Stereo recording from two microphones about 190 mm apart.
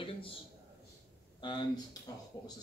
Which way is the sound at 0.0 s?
30° left (ahead or behind).